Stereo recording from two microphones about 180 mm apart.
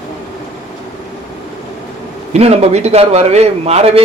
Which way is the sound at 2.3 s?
35° right (ahead or behind).